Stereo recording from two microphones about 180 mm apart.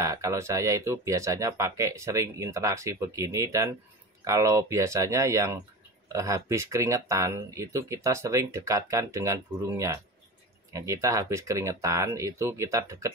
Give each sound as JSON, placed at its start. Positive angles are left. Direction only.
{"t": 0.0, "sound": "speech", "side_deg": -15}